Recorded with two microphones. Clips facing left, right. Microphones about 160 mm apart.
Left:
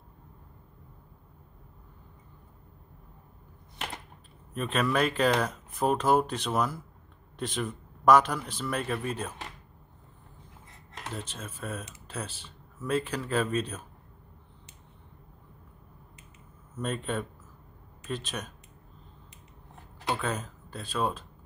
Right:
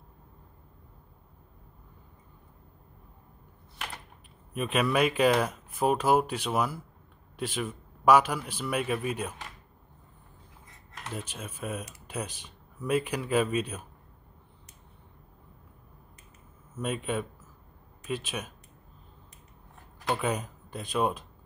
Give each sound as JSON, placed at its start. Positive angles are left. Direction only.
{"t": 4.6, "sound": "speech", "side_deg": -10}
{"t": 11.1, "sound": "speech", "side_deg": -10}
{"t": 16.7, "sound": "speech", "side_deg": -10}
{"t": 20.2, "sound": "speech", "side_deg": -15}